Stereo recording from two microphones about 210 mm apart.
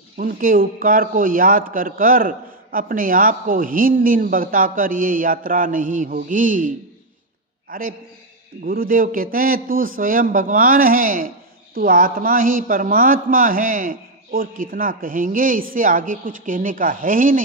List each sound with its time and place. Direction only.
0.2 s a man's voice: 40° right (ahead or behind)
7.7 s a man's voice: 40° right (ahead or behind)